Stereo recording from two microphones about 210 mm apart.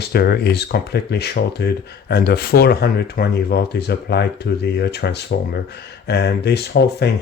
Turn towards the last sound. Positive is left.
turn(degrees=50)  # may be behind; listen again after turning